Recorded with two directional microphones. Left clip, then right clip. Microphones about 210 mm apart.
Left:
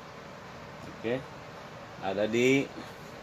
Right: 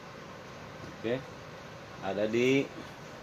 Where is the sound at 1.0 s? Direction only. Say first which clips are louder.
Left 1 dB; 5° left (ahead or behind).